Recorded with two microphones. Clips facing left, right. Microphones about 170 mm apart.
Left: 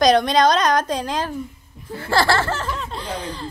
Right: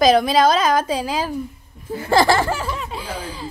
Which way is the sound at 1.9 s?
15° right (ahead or behind).